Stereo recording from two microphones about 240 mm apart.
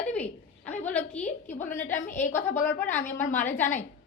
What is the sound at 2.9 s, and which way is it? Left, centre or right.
Speech, left.